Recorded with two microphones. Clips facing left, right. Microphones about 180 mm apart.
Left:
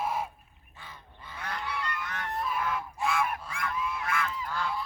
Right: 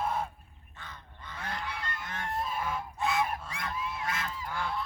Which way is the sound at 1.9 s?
25° right (ahead or behind).